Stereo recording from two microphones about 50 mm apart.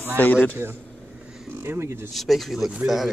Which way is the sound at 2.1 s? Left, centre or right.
Centre.